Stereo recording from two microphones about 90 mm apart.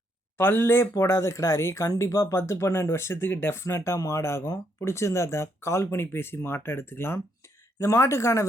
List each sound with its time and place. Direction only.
0.3 s speech: 25° left (ahead or behind)